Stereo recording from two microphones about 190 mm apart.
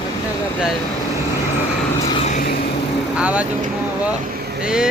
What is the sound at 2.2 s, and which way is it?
Vehicle, 40° left (ahead or behind).